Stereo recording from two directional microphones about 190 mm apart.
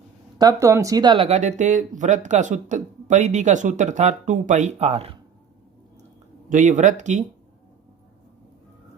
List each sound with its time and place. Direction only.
0.3 s speech: 20° right (ahead or behind)
6.5 s speech: 40° right (ahead or behind)